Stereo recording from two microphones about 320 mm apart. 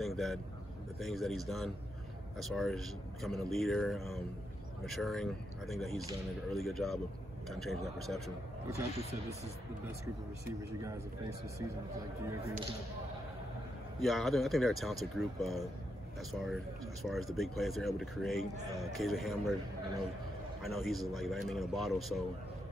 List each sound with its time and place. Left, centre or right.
0.0 s speech: centre
10.4 s speech: centre
13.9 s speech: centre
20.6 s speech: centre